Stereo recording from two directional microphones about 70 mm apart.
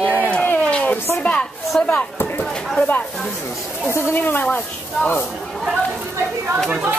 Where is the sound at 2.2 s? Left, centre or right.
Left.